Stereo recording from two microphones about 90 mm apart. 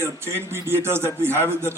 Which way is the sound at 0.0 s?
25° right (ahead or behind).